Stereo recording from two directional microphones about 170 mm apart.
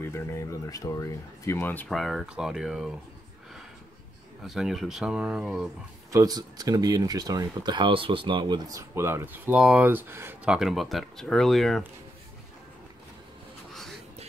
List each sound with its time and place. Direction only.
0.0 s speech: 15° left (ahead or behind)
2.0 s speech: centre (ahead or behind)
4.5 s speech: centre (ahead or behind)
6.1 s speech: 20° right (ahead or behind); by 11.8 s centre (ahead or behind)